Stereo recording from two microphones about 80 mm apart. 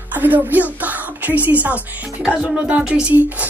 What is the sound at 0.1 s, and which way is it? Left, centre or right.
A woman's voice, right.